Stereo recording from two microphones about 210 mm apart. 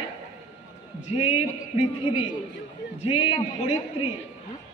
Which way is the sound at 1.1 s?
30° left (ahead or behind).